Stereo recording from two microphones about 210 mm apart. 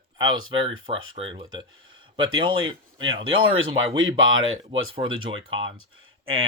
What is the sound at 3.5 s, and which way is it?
Speech, 70° right (ahead or behind).